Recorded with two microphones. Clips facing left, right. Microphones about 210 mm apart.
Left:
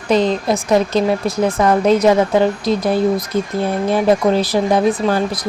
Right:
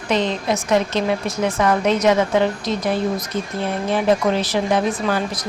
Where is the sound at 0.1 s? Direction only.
40° left (ahead or behind).